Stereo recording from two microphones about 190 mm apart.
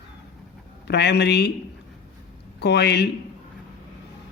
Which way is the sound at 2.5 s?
60° left (ahead or behind).